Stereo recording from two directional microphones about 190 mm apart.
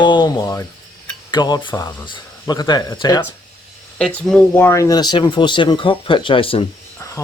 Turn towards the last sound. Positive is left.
turn(degrees=15)  # may be behind; listen again after turning